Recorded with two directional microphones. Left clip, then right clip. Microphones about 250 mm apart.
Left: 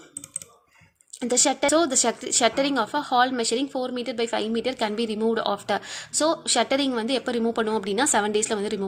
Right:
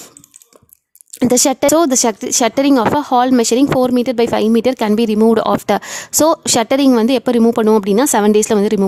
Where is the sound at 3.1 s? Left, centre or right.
Right.